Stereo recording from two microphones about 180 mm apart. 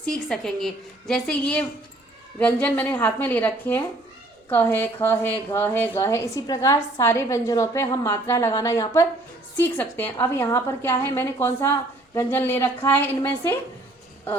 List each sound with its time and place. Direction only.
0.3 s a woman's voice: centre (ahead or behind)